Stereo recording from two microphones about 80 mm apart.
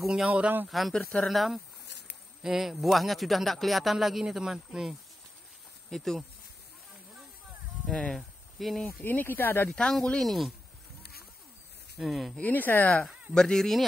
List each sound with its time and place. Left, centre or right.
0.0 s speech: centre
0.3 s speech: centre
0.7 s speech: centre
7.8 s a sound: centre
8.8 s speech: left
9.7 s speech: centre
12.0 s speech: centre
12.4 s speech: left
13.3 s speech: centre